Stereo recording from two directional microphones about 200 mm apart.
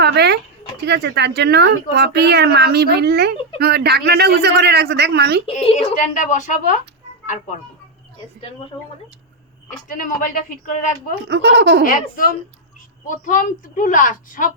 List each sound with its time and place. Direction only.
0.0 s a woman's voice: 55° right (ahead or behind)
5.5 s a woman's voice: 30° left (ahead or behind)
9.9 s a woman's voice: 40° left (ahead or behind)
11.3 s a woman's voice: 60° right (ahead or behind)
11.8 s a woman's voice: 45° left (ahead or behind)